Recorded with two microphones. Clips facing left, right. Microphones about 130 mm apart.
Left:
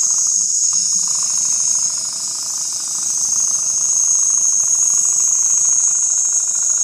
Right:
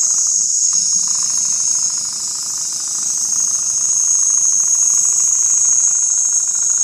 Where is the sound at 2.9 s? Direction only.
25° left (ahead or behind).